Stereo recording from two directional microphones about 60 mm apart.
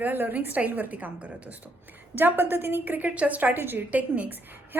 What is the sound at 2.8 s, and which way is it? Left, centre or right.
A woman's voice, right.